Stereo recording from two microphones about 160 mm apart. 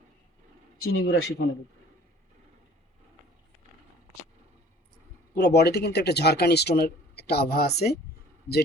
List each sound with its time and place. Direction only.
1.0 s a man's voice: 75° left (ahead or behind)
5.3 s speech: 90° left